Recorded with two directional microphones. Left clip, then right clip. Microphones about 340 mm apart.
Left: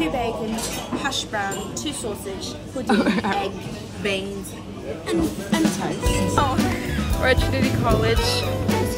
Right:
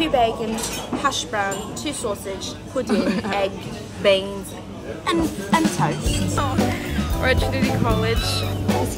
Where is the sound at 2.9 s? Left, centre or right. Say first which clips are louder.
Left 3 dB; centre.